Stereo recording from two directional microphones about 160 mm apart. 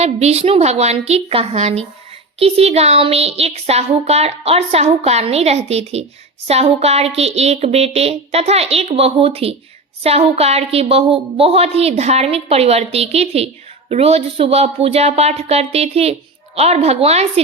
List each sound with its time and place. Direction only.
0.0 s a woman's voice: 40° right (ahead or behind)